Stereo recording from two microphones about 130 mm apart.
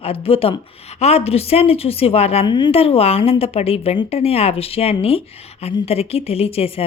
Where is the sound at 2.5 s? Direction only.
40° left (ahead or behind).